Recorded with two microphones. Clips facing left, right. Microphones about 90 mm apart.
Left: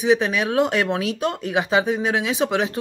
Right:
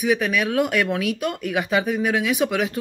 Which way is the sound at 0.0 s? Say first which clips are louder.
Left 2 dB; 25° left (ahead or behind).